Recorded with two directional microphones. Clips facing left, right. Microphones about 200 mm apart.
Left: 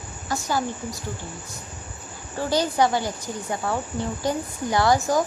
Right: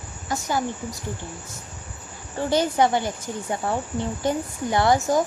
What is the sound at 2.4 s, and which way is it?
Speech, 20° right (ahead or behind).